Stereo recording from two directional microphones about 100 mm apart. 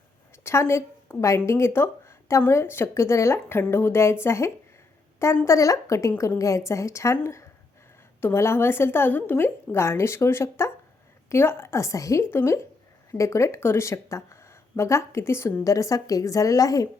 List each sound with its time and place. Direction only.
0.4 s a woman's voice: 25° left (ahead or behind)